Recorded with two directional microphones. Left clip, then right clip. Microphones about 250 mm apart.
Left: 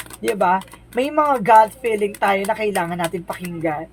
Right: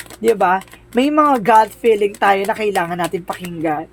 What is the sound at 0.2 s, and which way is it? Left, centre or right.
A woman's voice, right.